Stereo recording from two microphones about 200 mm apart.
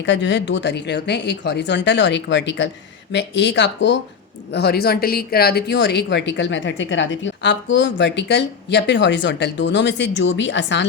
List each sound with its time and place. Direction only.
0.0 s speech: 65° left (ahead or behind)
4.5 s speech: 55° left (ahead or behind)